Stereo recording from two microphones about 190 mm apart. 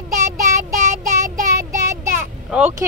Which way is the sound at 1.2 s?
15° right (ahead or behind).